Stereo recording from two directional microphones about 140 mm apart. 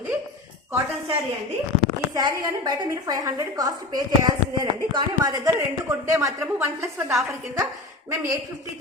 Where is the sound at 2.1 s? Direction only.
25° right (ahead or behind).